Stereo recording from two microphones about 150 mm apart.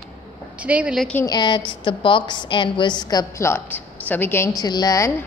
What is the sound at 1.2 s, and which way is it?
A woman's voice, 30° left (ahead or behind).